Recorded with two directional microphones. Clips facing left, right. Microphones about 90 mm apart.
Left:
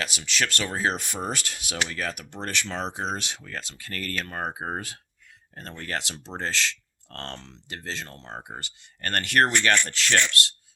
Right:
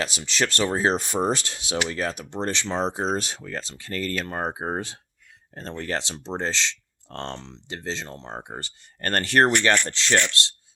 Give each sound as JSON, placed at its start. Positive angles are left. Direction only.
{"t": 0.0, "sound": "speech", "side_deg": -30}